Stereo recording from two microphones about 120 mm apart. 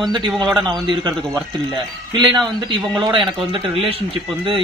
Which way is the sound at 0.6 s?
35° right (ahead or behind).